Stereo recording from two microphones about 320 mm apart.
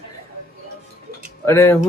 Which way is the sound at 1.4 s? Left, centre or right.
Centre.